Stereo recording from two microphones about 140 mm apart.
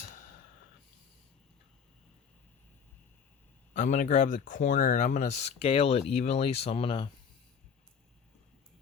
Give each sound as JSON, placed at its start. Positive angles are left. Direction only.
{"t": 3.8, "sound": "speech", "side_deg": 65}
{"t": 5.6, "sound": "speech", "side_deg": 45}